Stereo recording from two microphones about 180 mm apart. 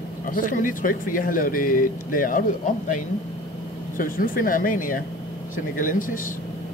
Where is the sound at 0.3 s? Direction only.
50° left (ahead or behind).